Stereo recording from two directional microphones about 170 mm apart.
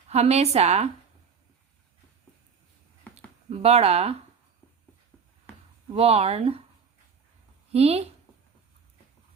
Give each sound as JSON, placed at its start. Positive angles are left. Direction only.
{"t": 0.1, "sound": "speech", "side_deg": -40}
{"t": 3.5, "sound": "speech", "side_deg": -35}
{"t": 5.9, "sound": "speech", "side_deg": -35}
{"t": 7.7, "sound": "speech", "side_deg": -35}